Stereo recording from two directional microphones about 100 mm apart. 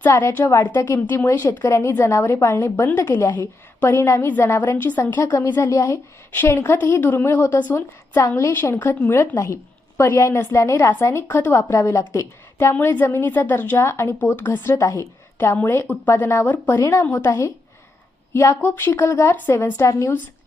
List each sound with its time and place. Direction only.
0.0 s a woman's voice: 30° left (ahead or behind)
5.2 s a woman's voice: 30° left (ahead or behind)
17.1 s a woman's voice: 20° left (ahead or behind)